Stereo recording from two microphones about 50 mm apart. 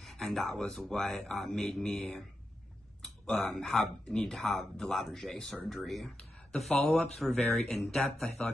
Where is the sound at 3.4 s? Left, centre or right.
Centre.